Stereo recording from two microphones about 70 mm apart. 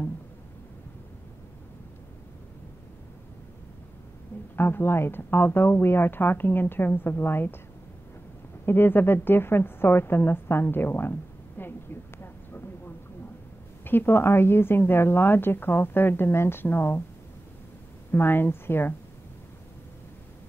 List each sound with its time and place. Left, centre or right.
4.6 s a woman's voice: left
8.6 s a sound: left
13.8 s a woman's voice: left
18.1 s a woman's voice: left